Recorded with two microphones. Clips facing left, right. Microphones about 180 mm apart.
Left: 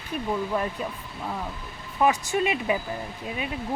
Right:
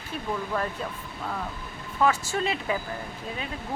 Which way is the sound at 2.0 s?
15° left (ahead or behind).